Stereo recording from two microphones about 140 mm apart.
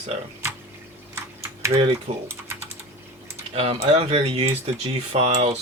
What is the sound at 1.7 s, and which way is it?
Speech, 45° right (ahead or behind).